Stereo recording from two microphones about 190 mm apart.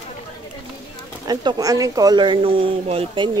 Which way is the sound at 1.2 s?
25° right (ahead or behind).